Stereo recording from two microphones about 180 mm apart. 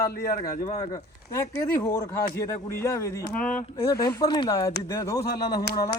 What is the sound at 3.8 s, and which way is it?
Speech, 20° left (ahead or behind).